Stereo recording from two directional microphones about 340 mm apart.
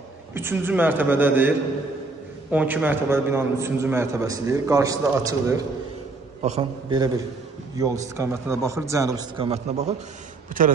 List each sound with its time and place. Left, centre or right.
0.3 s a man's voice: centre
2.5 s a man's voice: centre; by 10.7 s right